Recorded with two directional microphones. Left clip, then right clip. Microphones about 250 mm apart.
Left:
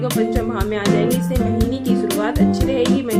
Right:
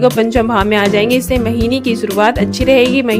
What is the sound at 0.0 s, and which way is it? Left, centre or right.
Speech, right.